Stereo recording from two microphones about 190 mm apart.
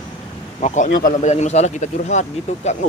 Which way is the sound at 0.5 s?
40° left (ahead or behind).